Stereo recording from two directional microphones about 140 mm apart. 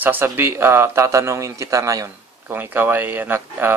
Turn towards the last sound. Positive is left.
turn(degrees=-15)  # may be behind; listen again after turning